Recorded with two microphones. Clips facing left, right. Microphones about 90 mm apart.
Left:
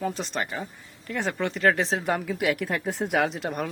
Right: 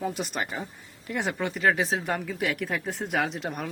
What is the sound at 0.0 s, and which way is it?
A man's voice, 10° right (ahead or behind).